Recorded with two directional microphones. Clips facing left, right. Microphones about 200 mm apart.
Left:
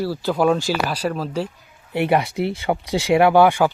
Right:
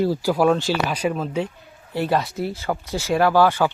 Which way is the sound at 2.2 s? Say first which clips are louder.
Left 3 dB; 70° left (ahead or behind).